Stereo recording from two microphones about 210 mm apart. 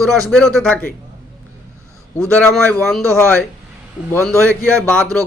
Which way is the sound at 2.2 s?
5° left (ahead or behind).